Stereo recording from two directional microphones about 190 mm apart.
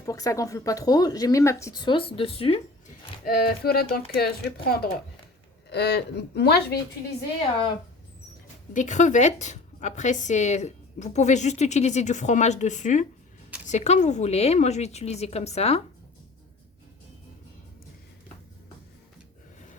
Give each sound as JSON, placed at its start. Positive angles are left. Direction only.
{"t": 0.0, "sound": "speech", "side_deg": 20}
{"t": 3.2, "sound": "speech", "side_deg": 50}
{"t": 8.7, "sound": "a woman's voice", "side_deg": 40}